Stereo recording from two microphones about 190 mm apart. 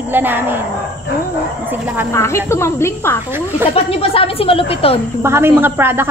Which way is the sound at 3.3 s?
10° right (ahead or behind).